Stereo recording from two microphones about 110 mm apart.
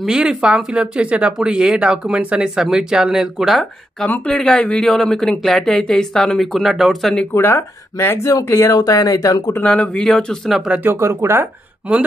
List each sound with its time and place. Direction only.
0.0 s speech: 5° right (ahead or behind)
7.3 s speech: 20° left (ahead or behind)
9.6 s speech: 10° left (ahead or behind)
10.7 s speech: 20° right (ahead or behind)